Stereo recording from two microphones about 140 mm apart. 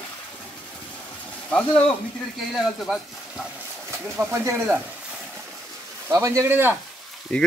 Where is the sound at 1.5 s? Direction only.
5° left (ahead or behind).